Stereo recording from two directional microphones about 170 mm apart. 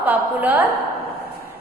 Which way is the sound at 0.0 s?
10° right (ahead or behind).